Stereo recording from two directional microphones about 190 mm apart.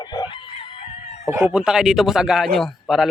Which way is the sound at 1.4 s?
5° right (ahead or behind).